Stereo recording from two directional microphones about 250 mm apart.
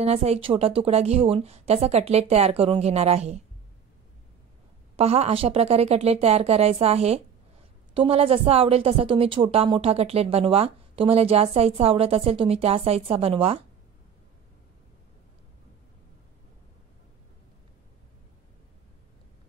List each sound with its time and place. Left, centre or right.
0.0 s a woman's voice: right
4.9 s a woman's voice: right